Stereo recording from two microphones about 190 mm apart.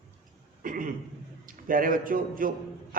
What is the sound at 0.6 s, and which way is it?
Cough, 45° right (ahead or behind).